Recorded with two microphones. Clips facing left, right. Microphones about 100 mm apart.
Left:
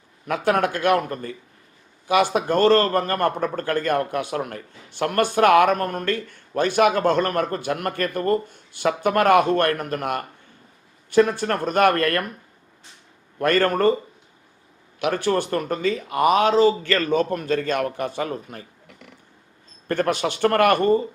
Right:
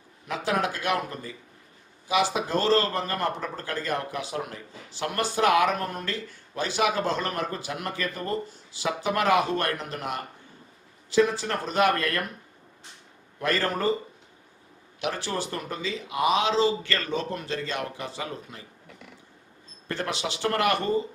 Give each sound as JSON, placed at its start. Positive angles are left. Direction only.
{"t": 0.3, "sound": "a man's voice", "side_deg": 55}
{"t": 13.4, "sound": "a man's voice", "side_deg": 55}
{"t": 14.9, "sound": "speech", "side_deg": 55}
{"t": 19.9, "sound": "speech", "side_deg": 50}